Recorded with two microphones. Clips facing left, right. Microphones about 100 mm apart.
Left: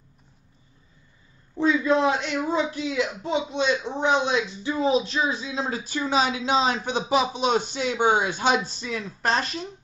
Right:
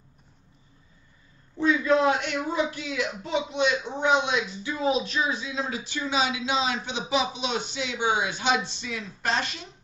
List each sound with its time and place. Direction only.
1.6 s speech: 25° left (ahead or behind); by 9.5 s 40° left (ahead or behind)